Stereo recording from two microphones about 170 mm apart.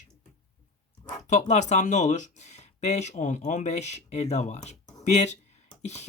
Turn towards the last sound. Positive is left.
turn(degrees=40)  # may be behind; listen again after turning